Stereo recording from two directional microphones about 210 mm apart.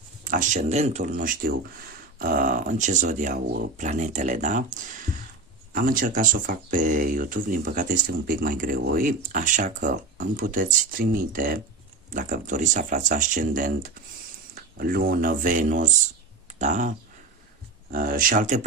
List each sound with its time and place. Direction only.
0.3 s speech: 35° right (ahead or behind)
17.9 s speech: 40° right (ahead or behind)